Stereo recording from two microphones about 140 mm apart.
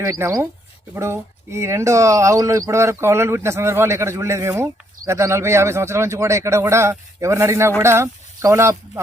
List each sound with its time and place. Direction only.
0.0 s speech: 20° right (ahead or behind)